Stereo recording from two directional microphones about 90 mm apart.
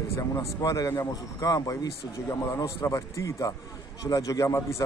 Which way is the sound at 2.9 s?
35° left (ahead or behind).